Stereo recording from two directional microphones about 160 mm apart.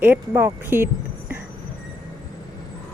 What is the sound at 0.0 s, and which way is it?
Speech, 10° right (ahead or behind).